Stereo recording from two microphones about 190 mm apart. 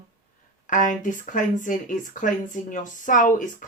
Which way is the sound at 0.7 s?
45° left (ahead or behind).